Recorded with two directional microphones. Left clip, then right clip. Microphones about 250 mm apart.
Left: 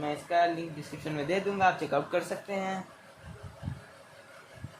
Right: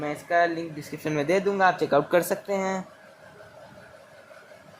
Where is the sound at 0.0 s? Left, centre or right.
Right.